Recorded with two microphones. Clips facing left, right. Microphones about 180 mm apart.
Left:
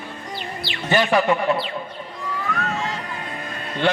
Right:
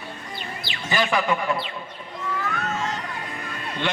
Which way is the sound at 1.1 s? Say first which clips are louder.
Left 5 dB; 35° left (ahead or behind).